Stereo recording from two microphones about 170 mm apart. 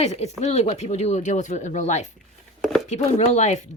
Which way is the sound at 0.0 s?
40° left (ahead or behind).